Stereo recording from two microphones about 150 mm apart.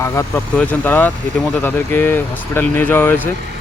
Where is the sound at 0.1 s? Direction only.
20° left (ahead or behind).